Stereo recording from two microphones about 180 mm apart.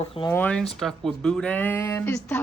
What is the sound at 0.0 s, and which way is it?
Speech, 30° left (ahead or behind).